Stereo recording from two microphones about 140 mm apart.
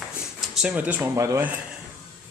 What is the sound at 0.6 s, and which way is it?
Speech, 10° right (ahead or behind).